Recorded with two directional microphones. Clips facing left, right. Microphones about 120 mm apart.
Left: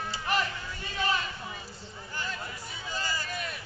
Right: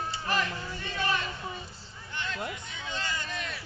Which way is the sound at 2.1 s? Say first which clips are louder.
Right 1 dB; 5° left (ahead or behind).